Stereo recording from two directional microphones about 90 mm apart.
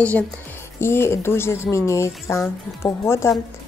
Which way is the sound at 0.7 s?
30° left (ahead or behind).